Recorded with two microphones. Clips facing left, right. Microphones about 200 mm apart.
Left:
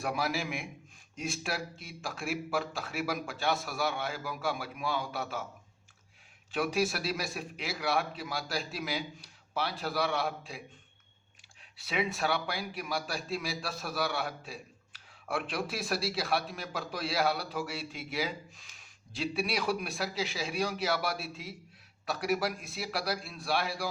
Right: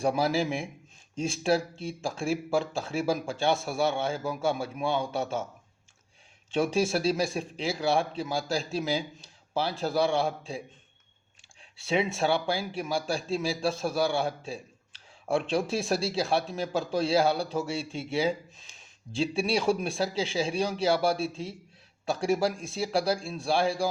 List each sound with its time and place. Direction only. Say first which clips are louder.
0.0 s a man's voice: right 7 dB; 30° right (ahead or behind)
6.5 s a man's voice: right 5 dB; 25° right (ahead or behind)
11.8 s a man's voice: right 5 dB; 25° right (ahead or behind)